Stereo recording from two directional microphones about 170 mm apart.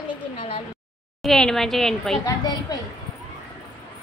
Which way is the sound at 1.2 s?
5° left (ahead or behind).